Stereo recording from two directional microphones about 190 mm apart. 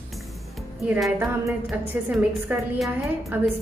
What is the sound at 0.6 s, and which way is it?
A woman's voice, centre (ahead or behind).